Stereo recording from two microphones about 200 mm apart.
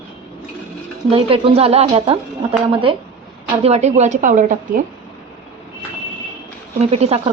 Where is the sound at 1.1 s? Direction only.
25° right (ahead or behind).